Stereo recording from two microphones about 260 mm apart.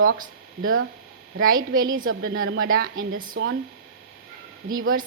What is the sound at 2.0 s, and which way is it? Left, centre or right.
A woman's voice, right.